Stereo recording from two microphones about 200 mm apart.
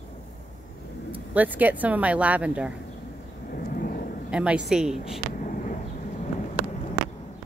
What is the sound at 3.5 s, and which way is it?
Vehicle, 45° left (ahead or behind).